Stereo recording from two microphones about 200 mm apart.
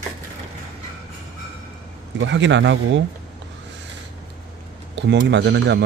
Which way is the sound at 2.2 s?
65° right (ahead or behind).